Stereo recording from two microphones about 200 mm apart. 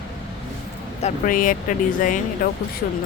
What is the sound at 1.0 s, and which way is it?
Speech, 45° left (ahead or behind).